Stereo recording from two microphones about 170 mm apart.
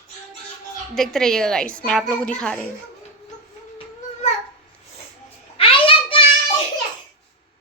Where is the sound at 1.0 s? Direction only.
Centre (ahead or behind).